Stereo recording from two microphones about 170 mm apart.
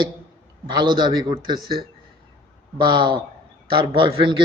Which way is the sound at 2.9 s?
30° right (ahead or behind).